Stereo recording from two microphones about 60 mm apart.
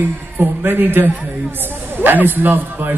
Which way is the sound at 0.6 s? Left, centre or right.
Right.